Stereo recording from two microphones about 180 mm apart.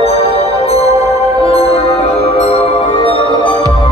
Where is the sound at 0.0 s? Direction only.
35° left (ahead or behind).